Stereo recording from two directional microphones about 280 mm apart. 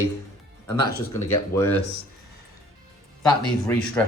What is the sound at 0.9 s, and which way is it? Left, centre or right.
Speech, left.